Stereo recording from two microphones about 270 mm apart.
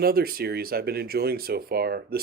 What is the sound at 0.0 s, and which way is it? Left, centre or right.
Speech, right.